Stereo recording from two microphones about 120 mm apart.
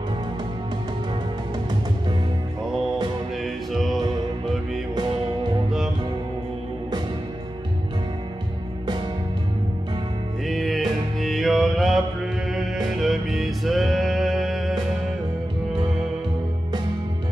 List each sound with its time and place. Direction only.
3.4 s music: centre (ahead or behind)
10.4 s music: centre (ahead or behind)